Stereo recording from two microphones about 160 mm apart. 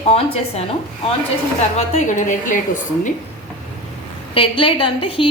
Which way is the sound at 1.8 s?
50° left (ahead or behind).